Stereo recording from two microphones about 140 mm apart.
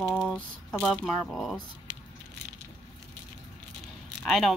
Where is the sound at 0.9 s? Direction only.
5° left (ahead or behind).